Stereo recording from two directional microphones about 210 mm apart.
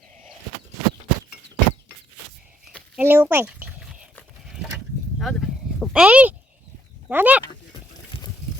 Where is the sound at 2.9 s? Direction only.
10° right (ahead or behind).